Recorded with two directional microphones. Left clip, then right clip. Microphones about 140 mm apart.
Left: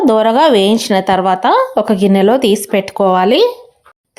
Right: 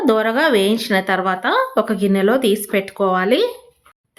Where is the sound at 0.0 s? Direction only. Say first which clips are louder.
Left 6 dB; 35° left (ahead or behind).